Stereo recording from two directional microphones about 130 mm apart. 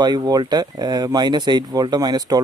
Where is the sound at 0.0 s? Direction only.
30° right (ahead or behind).